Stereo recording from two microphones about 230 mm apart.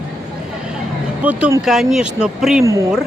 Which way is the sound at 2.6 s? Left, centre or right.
Centre.